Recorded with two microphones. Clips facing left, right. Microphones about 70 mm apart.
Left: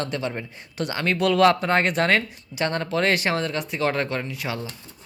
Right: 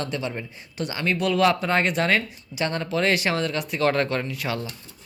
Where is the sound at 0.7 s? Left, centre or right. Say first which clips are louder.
Left 1 dB; left.